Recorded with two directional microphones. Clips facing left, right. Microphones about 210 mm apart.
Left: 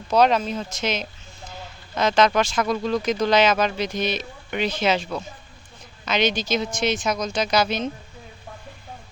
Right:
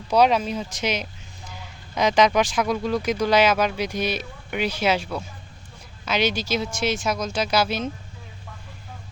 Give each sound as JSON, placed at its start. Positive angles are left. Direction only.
{"t": 0.1, "sound": "speech", "side_deg": -10}